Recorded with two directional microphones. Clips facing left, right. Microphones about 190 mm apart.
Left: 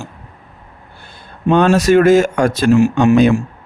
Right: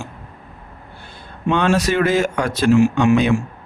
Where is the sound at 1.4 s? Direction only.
40° left (ahead or behind).